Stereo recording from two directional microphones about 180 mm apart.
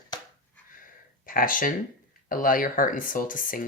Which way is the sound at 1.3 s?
50° left (ahead or behind).